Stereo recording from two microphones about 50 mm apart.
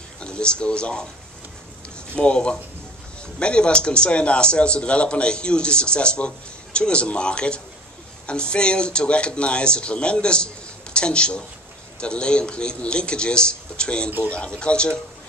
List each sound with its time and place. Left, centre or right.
0.2 s speech: centre
2.1 s speech: centre